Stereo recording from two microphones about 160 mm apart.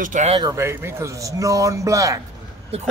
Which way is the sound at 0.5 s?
15° right (ahead or behind).